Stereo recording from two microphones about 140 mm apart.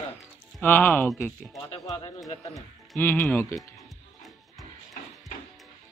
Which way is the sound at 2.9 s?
20° left (ahead or behind).